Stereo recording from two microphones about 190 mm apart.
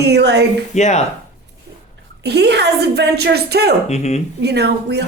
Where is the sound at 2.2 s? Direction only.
60° right (ahead or behind).